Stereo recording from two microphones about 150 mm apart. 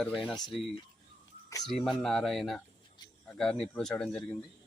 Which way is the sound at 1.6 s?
Centre (ahead or behind).